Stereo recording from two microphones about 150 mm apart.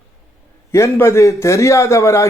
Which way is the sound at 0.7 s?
20° left (ahead or behind).